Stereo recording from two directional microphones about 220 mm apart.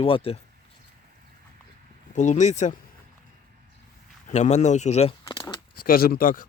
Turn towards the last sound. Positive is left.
turn(degrees=40)  # may be behind; listen again after turning